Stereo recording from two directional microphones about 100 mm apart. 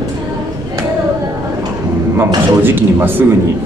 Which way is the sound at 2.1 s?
20° right (ahead or behind).